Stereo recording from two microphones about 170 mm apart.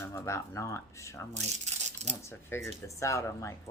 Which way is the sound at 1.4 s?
40° right (ahead or behind).